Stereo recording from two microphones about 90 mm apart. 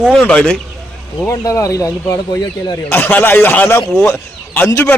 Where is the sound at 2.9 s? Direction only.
20° left (ahead or behind).